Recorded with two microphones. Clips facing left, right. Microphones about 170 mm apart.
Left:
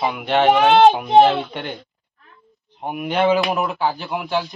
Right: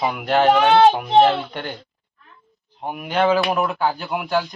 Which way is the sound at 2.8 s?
5° left (ahead or behind).